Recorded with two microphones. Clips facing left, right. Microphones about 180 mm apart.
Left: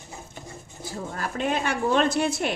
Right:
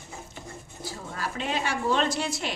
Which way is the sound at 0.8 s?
50° left (ahead or behind).